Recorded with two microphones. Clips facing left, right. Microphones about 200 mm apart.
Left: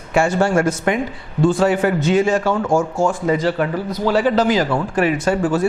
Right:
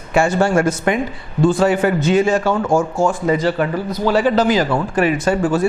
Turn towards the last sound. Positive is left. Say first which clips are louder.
# right 1 dB
turn(degrees=-25)  # may be behind; listen again after turning